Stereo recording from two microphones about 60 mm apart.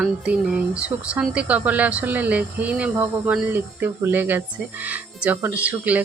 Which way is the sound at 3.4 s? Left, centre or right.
Right.